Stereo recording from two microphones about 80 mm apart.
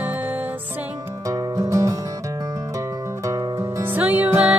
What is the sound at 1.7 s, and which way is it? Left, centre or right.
Music, right.